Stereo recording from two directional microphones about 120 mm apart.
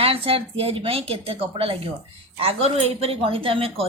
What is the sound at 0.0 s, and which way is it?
A woman's voice, 50° right (ahead or behind).